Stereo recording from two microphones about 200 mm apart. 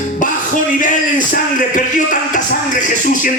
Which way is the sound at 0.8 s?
40° left (ahead or behind).